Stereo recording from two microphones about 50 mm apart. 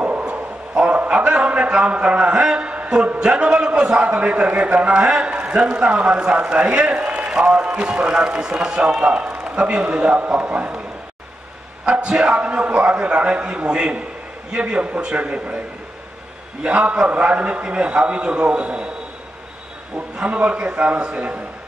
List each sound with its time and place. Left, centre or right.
0.2 s a man's voice: right
11.8 s a man's voice: centre
16.6 s a man's voice: right
20.2 s a man's voice: right